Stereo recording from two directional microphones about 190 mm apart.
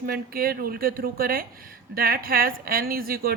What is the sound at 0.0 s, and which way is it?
Speech, 50° right (ahead or behind).